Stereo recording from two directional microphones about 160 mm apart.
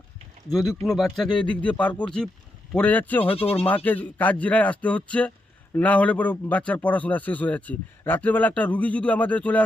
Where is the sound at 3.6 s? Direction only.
10° left (ahead or behind).